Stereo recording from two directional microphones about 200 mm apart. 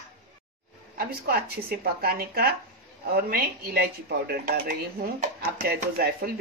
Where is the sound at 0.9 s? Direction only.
50° right (ahead or behind).